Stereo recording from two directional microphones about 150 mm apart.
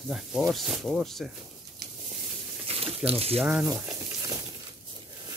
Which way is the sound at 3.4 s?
5° right (ahead or behind).